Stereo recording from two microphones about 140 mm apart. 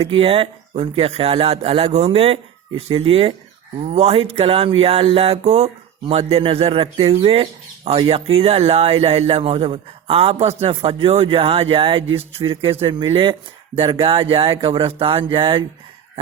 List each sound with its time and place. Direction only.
0.0 s speech: 45° right (ahead or behind)